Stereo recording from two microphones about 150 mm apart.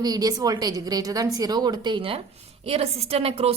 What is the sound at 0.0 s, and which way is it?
A woman's voice, 25° right (ahead or behind).